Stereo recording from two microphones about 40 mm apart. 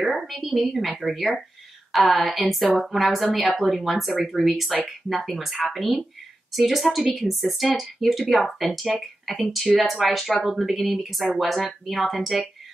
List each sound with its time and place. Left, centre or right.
0.0 s a woman's voice: centre